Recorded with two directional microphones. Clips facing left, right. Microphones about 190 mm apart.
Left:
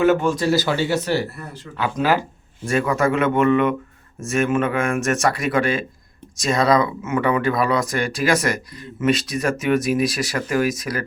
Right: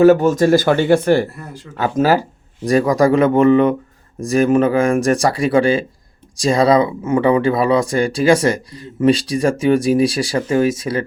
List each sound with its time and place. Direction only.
0.0 s speech: 40° right (ahead or behind)